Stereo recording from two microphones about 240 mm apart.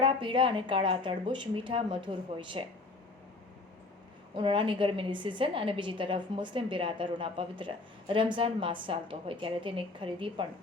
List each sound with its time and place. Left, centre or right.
0.0 s a woman's voice: right
4.4 s a woman's voice: right